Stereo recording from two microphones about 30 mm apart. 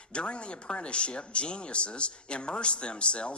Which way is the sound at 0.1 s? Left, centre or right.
Left.